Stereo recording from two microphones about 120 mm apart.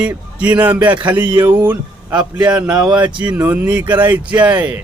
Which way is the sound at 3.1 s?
40° right (ahead or behind).